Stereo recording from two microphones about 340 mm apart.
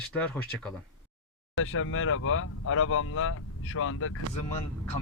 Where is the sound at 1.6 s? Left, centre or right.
Left.